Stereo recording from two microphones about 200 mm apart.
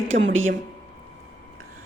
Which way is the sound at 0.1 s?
70° right (ahead or behind).